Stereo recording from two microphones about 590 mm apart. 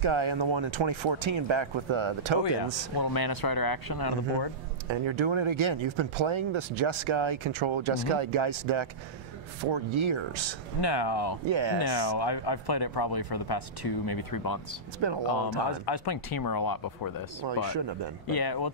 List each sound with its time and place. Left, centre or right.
0.0 s speech: right
3.0 s speech: left
4.8 s speech: right
10.8 s speech: left
11.4 s speech: right
11.8 s speech: left
15.0 s speech: right
15.2 s speech: left
17.7 s speech: right
18.2 s speech: left